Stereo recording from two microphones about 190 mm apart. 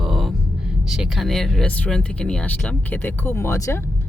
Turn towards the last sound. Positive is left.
turn(degrees=15)  # may be behind; listen again after turning